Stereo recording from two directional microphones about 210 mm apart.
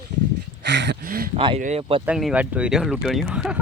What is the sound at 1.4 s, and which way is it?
Speech, 25° right (ahead or behind).